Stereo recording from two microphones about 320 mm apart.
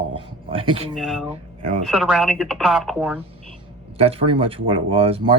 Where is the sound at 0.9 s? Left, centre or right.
Centre.